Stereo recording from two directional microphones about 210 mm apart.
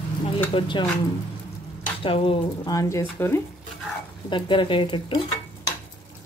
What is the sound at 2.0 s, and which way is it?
Speech, 25° left (ahead or behind).